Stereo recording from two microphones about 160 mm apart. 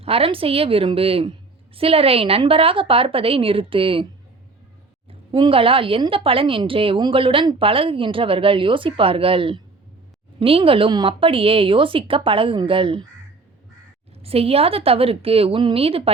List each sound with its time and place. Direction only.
0.0 s a woman's voice: 35° right (ahead or behind)
5.3 s a woman's voice: 35° right (ahead or behind)
14.2 s a woman's voice: 40° right (ahead or behind)